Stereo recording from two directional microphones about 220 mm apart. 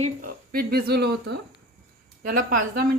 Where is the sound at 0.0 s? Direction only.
40° right (ahead or behind).